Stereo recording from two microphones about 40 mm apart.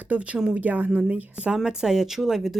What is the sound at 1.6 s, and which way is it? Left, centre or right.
Speech, centre.